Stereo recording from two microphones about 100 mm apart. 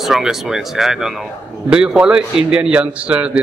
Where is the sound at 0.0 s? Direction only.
5° right (ahead or behind).